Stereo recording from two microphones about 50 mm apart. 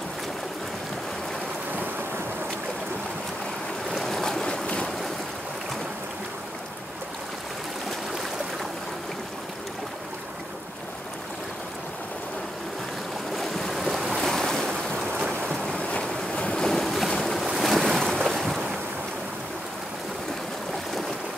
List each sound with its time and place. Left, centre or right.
3.9 s boat: centre
13.4 s waves: centre
15.6 s boat: centre
16.6 s boat: centre
17.5 s waves: centre